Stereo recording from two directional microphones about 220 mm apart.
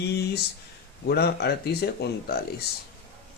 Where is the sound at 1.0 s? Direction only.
50° left (ahead or behind).